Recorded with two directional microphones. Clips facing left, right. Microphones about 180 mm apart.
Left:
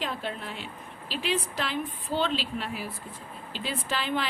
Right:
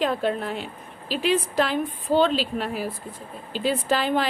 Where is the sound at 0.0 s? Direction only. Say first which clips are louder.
Right 10 dB; 45° right (ahead or behind).